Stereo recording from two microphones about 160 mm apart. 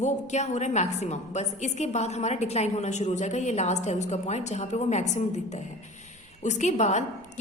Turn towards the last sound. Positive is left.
turn(degrees=45)  # may be behind; listen again after turning